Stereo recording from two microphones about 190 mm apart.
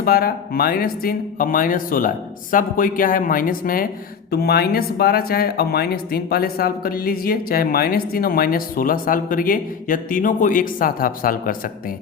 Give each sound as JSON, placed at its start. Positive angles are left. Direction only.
{"t": 0.0, "sound": "speech", "side_deg": 50}